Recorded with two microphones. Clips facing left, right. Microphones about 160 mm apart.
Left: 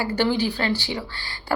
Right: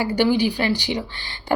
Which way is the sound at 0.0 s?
15° right (ahead or behind).